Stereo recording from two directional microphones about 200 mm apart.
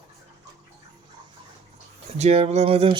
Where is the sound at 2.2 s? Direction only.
30° right (ahead or behind).